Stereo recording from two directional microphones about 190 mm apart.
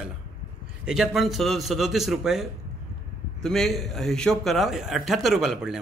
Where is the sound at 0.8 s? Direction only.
5° right (ahead or behind).